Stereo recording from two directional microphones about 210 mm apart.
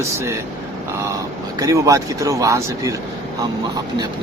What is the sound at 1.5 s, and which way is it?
Speech, 15° right (ahead or behind).